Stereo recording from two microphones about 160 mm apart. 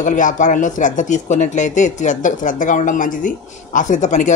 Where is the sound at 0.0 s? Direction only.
55° left (ahead or behind).